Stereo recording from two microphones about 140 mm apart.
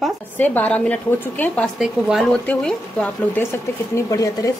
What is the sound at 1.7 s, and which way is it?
Speech, centre (ahead or behind).